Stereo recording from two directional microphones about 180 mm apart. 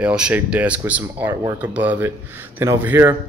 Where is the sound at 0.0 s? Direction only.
5° right (ahead or behind).